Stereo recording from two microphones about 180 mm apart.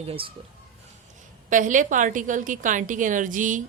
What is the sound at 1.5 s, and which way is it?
A woman's voice, 45° right (ahead or behind).